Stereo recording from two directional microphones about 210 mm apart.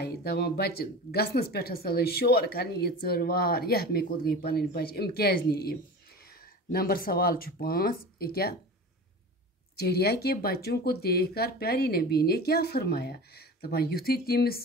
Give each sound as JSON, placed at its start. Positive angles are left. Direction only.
{"t": 0.0, "sound": "speech", "side_deg": 50}
{"t": 9.8, "sound": "speech", "side_deg": 50}